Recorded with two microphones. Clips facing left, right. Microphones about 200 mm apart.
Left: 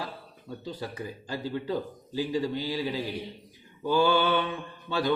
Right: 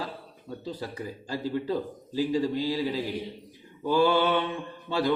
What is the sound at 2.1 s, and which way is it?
Mantra, 30° right (ahead or behind).